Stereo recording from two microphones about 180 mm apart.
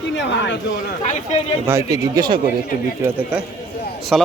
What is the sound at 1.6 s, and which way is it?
Speech, 15° right (ahead or behind).